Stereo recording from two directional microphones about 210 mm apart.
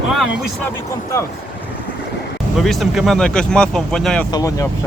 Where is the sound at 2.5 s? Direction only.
Centre (ahead or behind).